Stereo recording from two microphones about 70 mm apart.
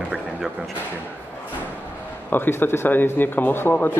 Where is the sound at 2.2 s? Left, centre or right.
Left.